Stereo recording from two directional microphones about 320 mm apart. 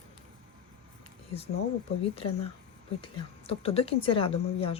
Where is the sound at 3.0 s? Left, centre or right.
Centre.